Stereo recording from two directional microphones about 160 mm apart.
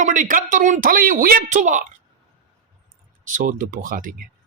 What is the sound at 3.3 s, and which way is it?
Speech, 55° right (ahead or behind).